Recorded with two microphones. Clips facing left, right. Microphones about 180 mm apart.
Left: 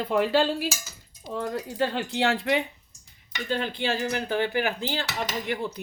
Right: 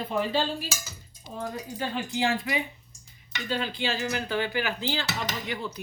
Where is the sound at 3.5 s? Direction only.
55° left (ahead or behind).